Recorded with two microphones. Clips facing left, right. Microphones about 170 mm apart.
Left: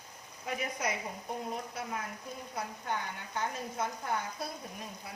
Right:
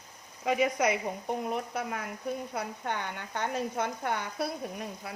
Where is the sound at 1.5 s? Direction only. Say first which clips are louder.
Right 5 dB; 70° right (ahead or behind).